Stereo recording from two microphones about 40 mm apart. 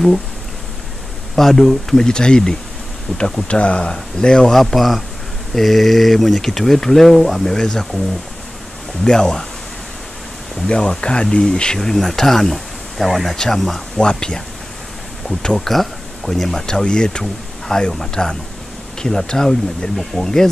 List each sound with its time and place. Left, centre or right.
1.3 s speech: centre
3.4 s speech: left
4.6 s speech: centre
9.0 s speech: centre
10.7 s speech: centre
13.9 s speech: left
15.4 s speech: centre